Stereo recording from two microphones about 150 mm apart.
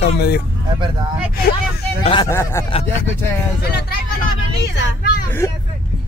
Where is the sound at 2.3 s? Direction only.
15° left (ahead or behind).